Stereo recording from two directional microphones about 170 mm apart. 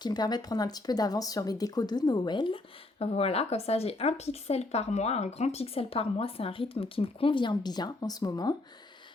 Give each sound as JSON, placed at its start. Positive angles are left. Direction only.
{"t": 0.0, "sound": "speech", "side_deg": 25}